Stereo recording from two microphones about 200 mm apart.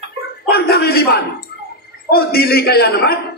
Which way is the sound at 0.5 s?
50° left (ahead or behind).